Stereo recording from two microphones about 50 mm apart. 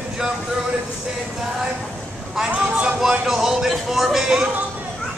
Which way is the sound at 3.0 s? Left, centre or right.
Centre.